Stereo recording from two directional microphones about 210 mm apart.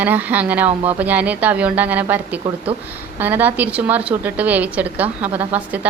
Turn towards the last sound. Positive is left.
turn(degrees=-5)  # may be behind; listen again after turning